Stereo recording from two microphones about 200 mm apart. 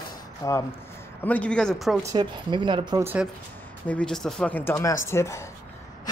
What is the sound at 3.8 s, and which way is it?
Speech, 5° left (ahead or behind).